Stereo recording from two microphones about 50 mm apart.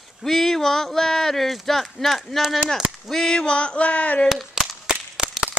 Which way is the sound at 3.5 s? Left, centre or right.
Left.